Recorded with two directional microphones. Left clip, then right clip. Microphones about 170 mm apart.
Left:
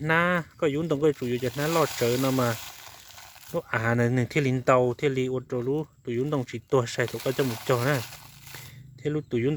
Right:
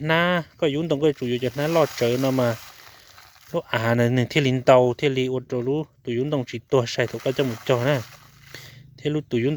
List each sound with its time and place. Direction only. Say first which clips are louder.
0.0 s speech: right 3 dB; 20° right (ahead or behind)
9.0 s speech: right 4 dB; 25° right (ahead or behind)